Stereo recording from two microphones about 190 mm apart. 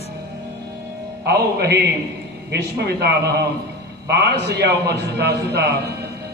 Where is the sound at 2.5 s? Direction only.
60° right (ahead or behind).